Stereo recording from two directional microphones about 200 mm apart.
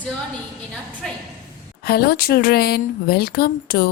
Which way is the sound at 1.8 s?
50° left (ahead or behind).